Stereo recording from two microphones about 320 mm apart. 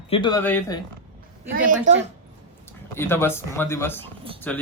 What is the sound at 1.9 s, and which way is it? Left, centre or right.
Speech, right.